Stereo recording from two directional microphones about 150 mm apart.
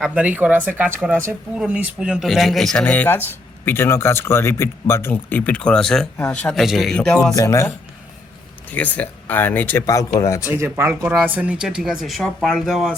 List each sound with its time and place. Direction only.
0.0 s speech: 10° right (ahead or behind)
7.3 s speech: 20° left (ahead or behind)
8.7 s speech: 10° left (ahead or behind)
10.5 s speech: 15° right (ahead or behind)